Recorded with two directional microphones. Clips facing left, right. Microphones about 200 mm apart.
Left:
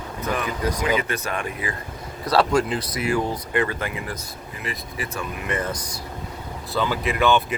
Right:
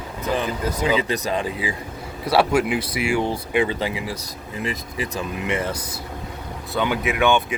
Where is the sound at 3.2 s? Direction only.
25° right (ahead or behind).